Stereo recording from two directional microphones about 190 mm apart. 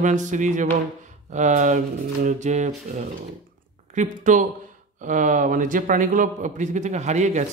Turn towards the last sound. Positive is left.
turn(degrees=-40)  # may be behind; listen again after turning